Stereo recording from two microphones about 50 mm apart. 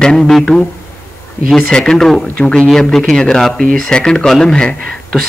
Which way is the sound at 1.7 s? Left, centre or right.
Centre.